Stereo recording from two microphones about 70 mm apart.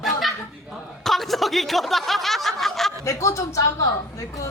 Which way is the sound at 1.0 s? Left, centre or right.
Centre.